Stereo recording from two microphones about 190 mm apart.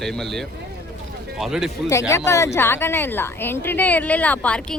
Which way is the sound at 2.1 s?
15° left (ahead or behind).